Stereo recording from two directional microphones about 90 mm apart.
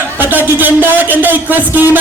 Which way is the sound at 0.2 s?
20° right (ahead or behind).